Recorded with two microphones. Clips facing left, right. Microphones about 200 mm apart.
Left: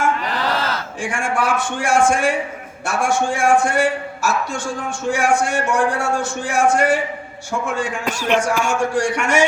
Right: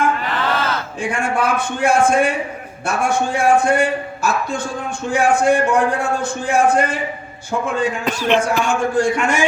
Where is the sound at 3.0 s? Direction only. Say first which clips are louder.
Even; 90° left.